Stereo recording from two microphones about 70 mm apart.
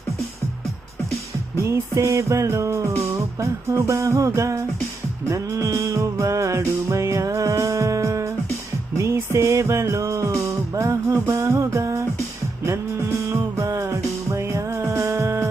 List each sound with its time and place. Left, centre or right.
1.5 s music: right
13.2 s music: right